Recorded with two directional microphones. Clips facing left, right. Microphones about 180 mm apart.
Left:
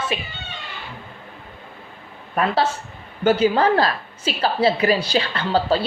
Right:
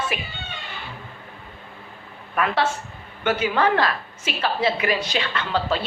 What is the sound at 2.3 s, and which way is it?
A woman's voice, 35° left (ahead or behind).